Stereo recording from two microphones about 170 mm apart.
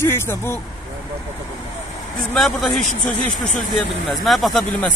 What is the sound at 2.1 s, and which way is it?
A man's voice, centre (ahead or behind).